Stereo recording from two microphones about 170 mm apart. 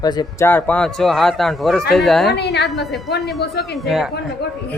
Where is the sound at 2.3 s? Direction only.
75° left (ahead or behind).